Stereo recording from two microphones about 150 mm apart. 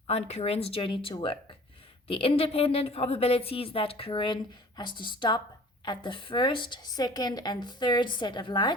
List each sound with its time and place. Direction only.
0.1 s a woman's voice: 45° left (ahead or behind)